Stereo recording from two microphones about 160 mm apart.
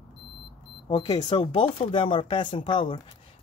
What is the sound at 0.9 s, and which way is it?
Speech, 25° left (ahead or behind).